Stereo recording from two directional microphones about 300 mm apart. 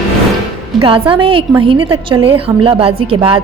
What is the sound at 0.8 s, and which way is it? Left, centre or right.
A woman's voice, centre.